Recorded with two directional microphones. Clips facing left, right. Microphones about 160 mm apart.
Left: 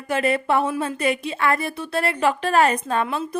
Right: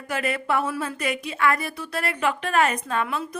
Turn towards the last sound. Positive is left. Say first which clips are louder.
# left 3 dB
turn(degrees=30)  # may be behind; listen again after turning